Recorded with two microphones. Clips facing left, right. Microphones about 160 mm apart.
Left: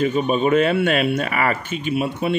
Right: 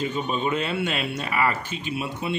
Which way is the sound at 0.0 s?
60° left (ahead or behind).